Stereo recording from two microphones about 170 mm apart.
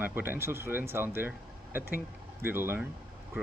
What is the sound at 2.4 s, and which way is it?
Speech, 10° right (ahead or behind).